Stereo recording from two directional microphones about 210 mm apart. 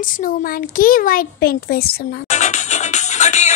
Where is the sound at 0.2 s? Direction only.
40° left (ahead or behind).